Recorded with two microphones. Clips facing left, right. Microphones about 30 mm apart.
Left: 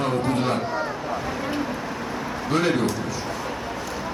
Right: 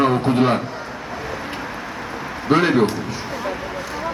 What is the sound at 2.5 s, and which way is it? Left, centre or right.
Speech, right.